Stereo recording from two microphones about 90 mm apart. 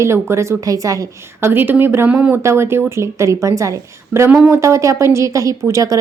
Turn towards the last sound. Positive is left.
turn(degrees=-35)  # may be behind; listen again after turning